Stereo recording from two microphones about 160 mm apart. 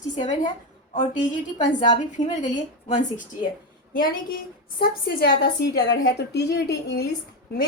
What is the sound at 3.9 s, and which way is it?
Speech, 65° left (ahead or behind).